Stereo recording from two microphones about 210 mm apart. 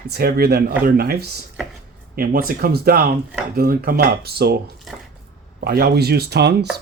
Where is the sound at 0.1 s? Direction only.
50° right (ahead or behind).